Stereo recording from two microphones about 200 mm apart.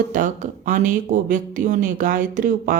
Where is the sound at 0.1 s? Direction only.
40° right (ahead or behind).